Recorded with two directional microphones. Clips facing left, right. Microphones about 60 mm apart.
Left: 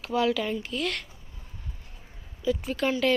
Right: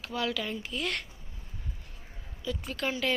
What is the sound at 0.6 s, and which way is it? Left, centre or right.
Speech, centre.